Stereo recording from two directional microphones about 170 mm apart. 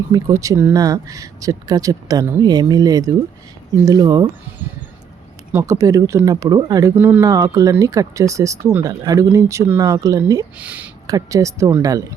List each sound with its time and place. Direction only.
0.1 s speech: 20° right (ahead or behind)
5.5 s speech: 15° right (ahead or behind)
6.9 s speech: 10° right (ahead or behind)
7.2 s speech: 20° right (ahead or behind)
10.6 s speech: 10° right (ahead or behind)
11.0 s speech: 20° right (ahead or behind)